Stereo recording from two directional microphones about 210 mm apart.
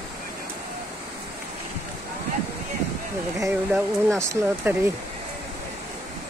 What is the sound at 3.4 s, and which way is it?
Speech, 15° right (ahead or behind).